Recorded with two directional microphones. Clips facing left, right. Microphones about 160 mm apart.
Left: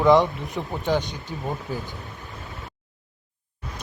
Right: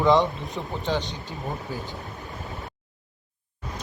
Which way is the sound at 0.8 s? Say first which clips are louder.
Left 4 dB; 15° left (ahead or behind).